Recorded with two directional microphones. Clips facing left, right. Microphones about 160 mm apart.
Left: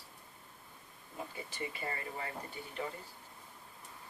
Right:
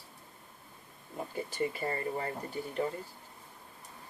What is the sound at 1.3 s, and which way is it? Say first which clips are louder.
Speech: right 12 dB; 45° right (ahead or behind).